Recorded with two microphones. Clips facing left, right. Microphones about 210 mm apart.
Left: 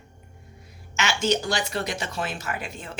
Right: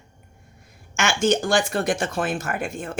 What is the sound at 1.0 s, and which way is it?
Speech, 50° right (ahead or behind).